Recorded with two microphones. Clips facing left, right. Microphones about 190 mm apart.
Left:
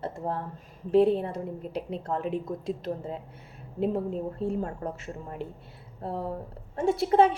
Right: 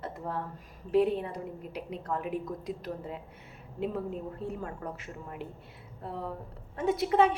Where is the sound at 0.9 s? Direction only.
30° left (ahead or behind).